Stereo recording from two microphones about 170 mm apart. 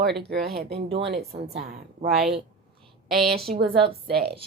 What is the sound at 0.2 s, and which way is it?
Speech, 70° right (ahead or behind).